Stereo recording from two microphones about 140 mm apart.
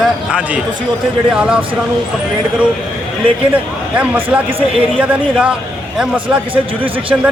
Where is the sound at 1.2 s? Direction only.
5° right (ahead or behind).